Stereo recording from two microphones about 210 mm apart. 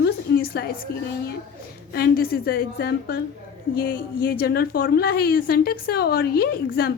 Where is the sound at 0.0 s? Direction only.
50° left (ahead or behind).